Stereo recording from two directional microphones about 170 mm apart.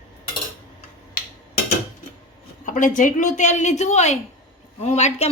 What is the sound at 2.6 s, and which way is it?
A woman's voice, 50° left (ahead or behind).